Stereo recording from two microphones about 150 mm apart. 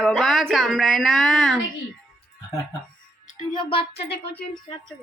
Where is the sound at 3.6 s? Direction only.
35° left (ahead or behind).